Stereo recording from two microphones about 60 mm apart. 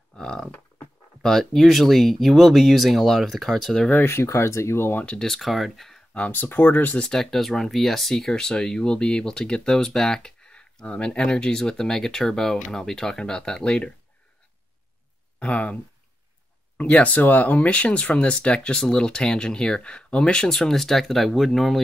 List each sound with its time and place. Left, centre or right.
0.1 s a sound: centre
1.2 s speech: centre
4.0 s speech: left
5.0 s speech: centre
5.3 s speech: centre
6.1 s speech: left
6.4 s speech: left
6.9 s speech: centre
15.3 s speech: left; by 21.7 s centre